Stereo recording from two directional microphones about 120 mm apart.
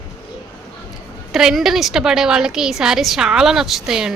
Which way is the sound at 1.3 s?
5° right (ahead or behind).